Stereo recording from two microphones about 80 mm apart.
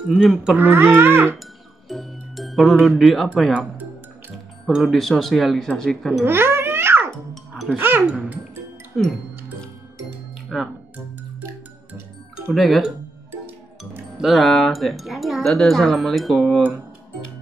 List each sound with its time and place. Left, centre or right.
0.1 s speech: centre
0.6 s a child's voice: right
1.9 s music: centre
3.0 s speech: centre
4.9 s speech: centre
6.2 s babbling: right
7.7 s a child's voice: right
8.0 s music: centre
9.0 s speech: centre
10.5 s speech: centre
11.9 s music: right
12.5 s speech: centre
14.1 s speech: centre